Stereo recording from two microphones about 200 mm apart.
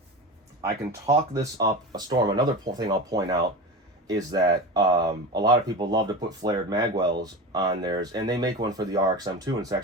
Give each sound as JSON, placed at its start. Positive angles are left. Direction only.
{"t": 0.6, "sound": "speech", "side_deg": -15}